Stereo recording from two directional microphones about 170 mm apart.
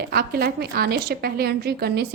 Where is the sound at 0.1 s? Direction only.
65° right (ahead or behind).